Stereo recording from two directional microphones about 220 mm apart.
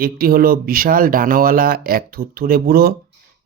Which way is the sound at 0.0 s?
45° right (ahead or behind).